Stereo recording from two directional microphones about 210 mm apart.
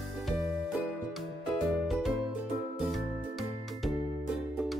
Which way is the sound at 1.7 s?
Centre (ahead or behind).